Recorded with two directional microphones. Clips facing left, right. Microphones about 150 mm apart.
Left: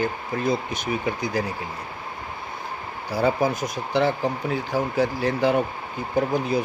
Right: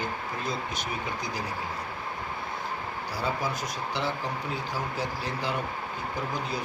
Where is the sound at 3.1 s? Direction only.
55° left (ahead or behind).